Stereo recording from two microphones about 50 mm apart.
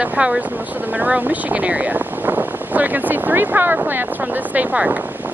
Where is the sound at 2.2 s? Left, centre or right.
Right.